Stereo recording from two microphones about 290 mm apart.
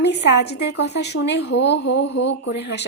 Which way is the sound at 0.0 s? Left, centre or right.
Left.